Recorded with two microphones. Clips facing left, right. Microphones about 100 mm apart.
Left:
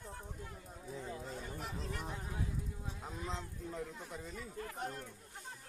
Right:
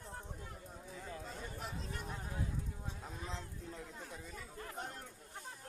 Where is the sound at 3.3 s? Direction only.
20° left (ahead or behind).